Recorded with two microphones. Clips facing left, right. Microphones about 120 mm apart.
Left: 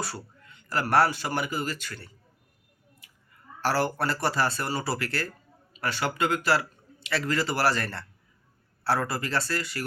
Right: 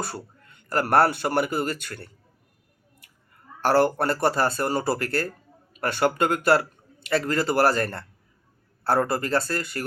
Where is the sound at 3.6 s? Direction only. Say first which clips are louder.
Right 6 dB; 50° right (ahead or behind).